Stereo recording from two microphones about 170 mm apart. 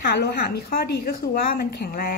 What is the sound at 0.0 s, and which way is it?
A woman's voice, 75° left (ahead or behind).